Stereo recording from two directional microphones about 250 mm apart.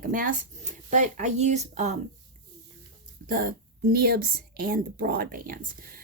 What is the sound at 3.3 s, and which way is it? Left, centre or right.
A woman's voice, right.